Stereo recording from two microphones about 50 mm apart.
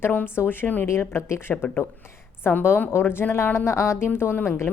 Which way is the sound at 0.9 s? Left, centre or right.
Left.